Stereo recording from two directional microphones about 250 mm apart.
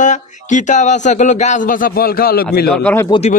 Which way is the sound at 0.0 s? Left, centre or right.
Left.